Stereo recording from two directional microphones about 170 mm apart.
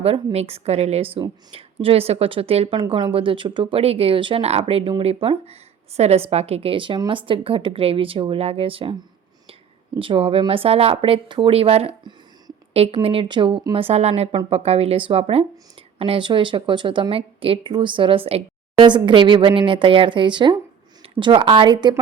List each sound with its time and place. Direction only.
0.0 s a woman's voice: 35° right (ahead or behind)
10.0 s a woman's voice: 30° right (ahead or behind)